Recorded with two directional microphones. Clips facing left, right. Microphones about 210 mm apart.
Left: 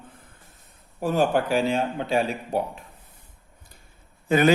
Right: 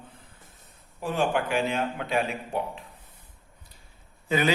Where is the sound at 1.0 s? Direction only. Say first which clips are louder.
Left 4 dB; 40° left (ahead or behind).